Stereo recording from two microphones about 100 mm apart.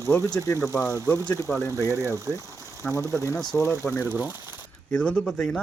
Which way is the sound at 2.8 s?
5° left (ahead or behind).